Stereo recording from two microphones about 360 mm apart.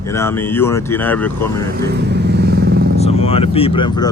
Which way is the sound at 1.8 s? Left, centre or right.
Right.